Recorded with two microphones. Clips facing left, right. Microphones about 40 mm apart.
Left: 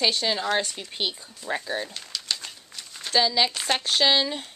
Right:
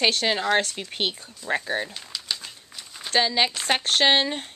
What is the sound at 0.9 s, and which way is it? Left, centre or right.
Speech, right.